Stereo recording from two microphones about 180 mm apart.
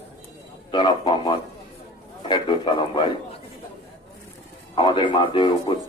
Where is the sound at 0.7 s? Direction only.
25° left (ahead or behind).